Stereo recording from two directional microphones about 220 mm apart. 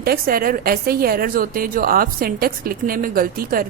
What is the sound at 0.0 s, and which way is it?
A woman's voice, 45° right (ahead or behind).